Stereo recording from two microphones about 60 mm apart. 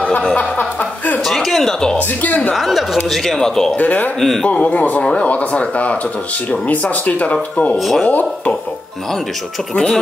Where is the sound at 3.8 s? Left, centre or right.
Left.